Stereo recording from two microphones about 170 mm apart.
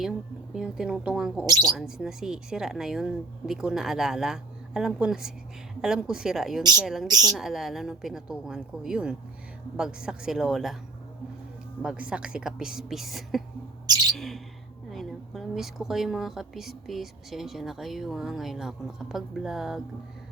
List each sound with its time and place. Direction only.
0.5 s a woman's voice: 5° right (ahead or behind)
1.5 s a woman's voice: 20° right (ahead or behind)
1.7 s a woman's voice: 5° right (ahead or behind)
7.1 s a woman's voice: 20° right (ahead or behind)
7.3 s a woman's voice: centre (ahead or behind)
11.8 s a woman's voice: 5° right (ahead or behind)
13.8 s bird: 25° right (ahead or behind)
14.1 s bird: centre (ahead or behind)
14.8 s a woman's voice: centre (ahead or behind)